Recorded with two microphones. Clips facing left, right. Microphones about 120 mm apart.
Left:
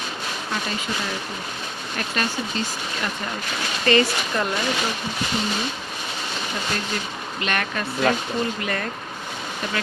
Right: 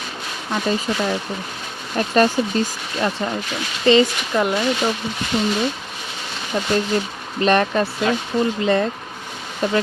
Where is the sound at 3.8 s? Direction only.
20° right (ahead or behind).